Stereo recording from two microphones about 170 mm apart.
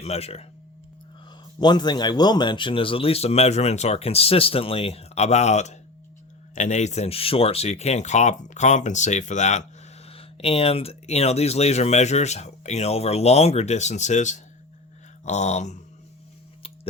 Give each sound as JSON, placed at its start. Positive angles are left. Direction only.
{"t": 0.0, "sound": "speech", "side_deg": 35}
{"t": 1.5, "sound": "speech", "side_deg": 25}